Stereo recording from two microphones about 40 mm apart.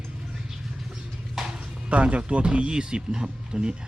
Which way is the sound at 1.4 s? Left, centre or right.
Centre.